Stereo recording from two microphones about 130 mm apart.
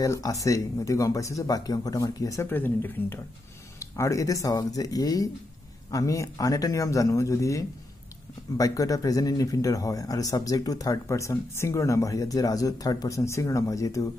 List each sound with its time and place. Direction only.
0.0 s speech: 25° left (ahead or behind)
2.5 s speech: 15° left (ahead or behind)